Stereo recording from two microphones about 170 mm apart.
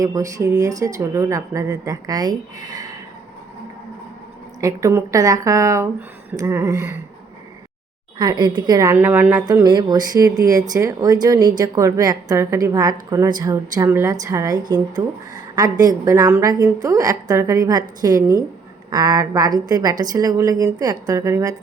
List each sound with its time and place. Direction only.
0.0 s a woman's voice: 20° right (ahead or behind)
4.6 s a woman's voice: 15° right (ahead or behind)
8.2 s a woman's voice: 25° right (ahead or behind)